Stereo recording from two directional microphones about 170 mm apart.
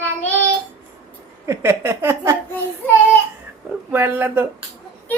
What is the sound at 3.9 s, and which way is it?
Speech, 10° right (ahead or behind).